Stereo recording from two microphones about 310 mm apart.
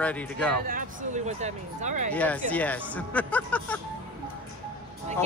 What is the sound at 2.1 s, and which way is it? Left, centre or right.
A man's voice, centre.